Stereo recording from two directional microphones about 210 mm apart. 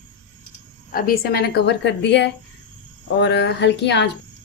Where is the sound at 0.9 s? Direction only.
45° left (ahead or behind).